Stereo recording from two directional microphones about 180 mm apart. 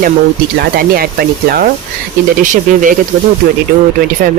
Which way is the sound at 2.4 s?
45° right (ahead or behind).